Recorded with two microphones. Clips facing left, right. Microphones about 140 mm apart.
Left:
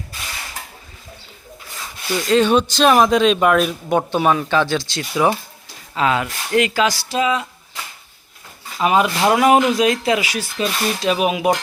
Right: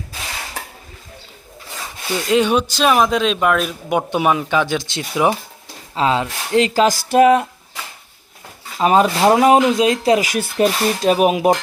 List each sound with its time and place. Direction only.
2.1 s speech: 15° right (ahead or behind)
6.8 s speech: 50° right (ahead or behind)
8.8 s speech: 35° right (ahead or behind)